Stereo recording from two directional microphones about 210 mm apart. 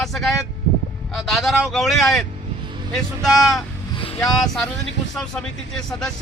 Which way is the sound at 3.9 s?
25° left (ahead or behind).